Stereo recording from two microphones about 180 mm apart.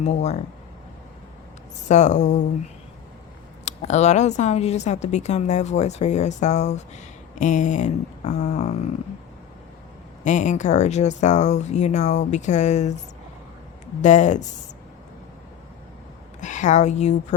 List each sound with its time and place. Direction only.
0.0 s a woman's voice: 40° left (ahead or behind)
1.9 s a woman's voice: 40° left (ahead or behind)
3.7 s a woman's voice: 40° left (ahead or behind)
10.2 s a woman's voice: 45° left (ahead or behind)
14.0 s speech: 45° left (ahead or behind)
16.4 s a woman's voice: 45° left (ahead or behind)